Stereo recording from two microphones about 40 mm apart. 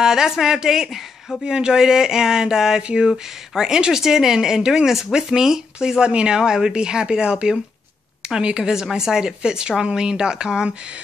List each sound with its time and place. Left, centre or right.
0.0 s a woman's voice: centre